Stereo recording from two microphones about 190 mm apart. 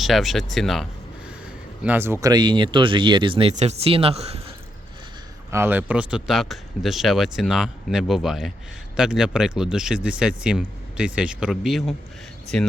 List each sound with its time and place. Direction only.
0.0 s speech: centre (ahead or behind)
1.8 s speech: 10° right (ahead or behind)
2.2 s speech: 20° right (ahead or behind)
5.5 s speech: 10° right (ahead or behind); by 12.7 s 5° left (ahead or behind)